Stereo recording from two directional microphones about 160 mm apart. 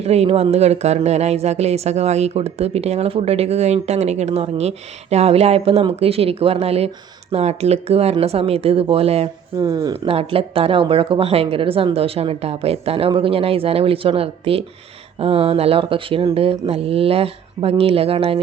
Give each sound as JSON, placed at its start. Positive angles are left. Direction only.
{"t": 0.0, "sound": "speech", "side_deg": -40}
{"t": 9.6, "sound": "speech", "side_deg": -20}
{"t": 9.9, "sound": "speech", "side_deg": -35}